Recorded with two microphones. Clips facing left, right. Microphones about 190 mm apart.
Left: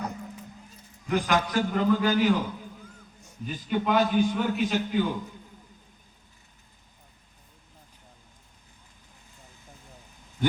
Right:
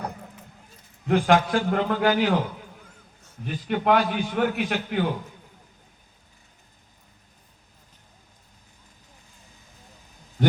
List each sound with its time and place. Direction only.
1.0 s a man's voice: 55° right (ahead or behind)
3.4 s a man's voice: 60° right (ahead or behind)